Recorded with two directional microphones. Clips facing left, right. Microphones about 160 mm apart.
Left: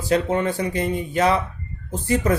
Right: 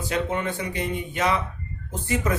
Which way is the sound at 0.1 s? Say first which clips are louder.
Left 7 dB; 35° left (ahead or behind).